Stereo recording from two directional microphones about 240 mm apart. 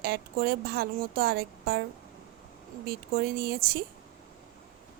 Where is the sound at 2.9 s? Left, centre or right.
Right.